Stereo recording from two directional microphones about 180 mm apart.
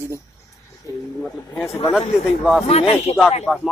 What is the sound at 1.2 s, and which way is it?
Speech, 10° left (ahead or behind).